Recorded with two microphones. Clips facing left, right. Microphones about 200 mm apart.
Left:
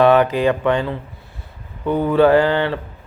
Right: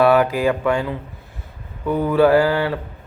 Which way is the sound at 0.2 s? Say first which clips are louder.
Left 2 dB; 5° right (ahead or behind).